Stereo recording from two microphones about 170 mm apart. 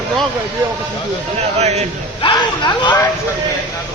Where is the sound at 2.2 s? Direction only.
25° left (ahead or behind).